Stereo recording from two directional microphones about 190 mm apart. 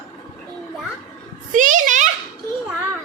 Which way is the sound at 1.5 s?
45° right (ahead or behind).